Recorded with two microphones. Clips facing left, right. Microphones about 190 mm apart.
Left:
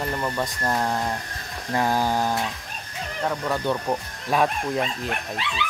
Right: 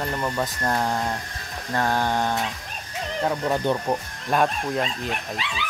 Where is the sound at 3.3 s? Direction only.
20° right (ahead or behind).